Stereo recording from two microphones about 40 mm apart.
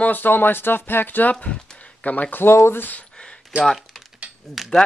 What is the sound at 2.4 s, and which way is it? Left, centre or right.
Speech, left.